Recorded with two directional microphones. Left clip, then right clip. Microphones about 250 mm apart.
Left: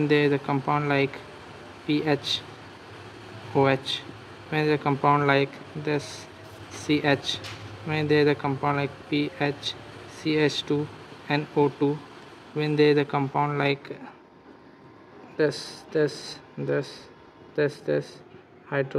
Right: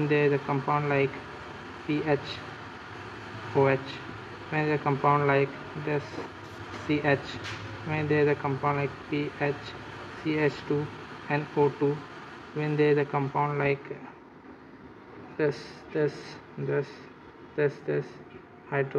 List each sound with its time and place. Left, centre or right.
0.1 s a man's voice: left
3.5 s a man's voice: left
15.3 s a man's voice: left